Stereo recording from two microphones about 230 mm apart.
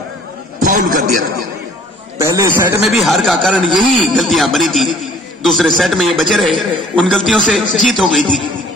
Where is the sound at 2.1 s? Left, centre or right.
Centre.